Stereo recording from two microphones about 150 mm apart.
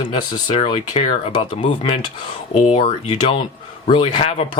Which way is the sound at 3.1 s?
35° left (ahead or behind).